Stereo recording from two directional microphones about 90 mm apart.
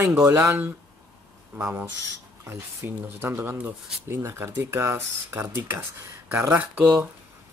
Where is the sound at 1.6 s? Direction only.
20° right (ahead or behind).